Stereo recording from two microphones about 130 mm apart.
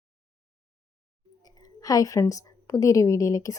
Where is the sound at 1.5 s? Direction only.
30° left (ahead or behind).